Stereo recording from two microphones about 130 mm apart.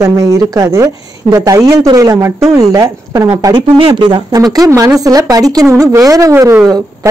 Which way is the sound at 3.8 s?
40° right (ahead or behind).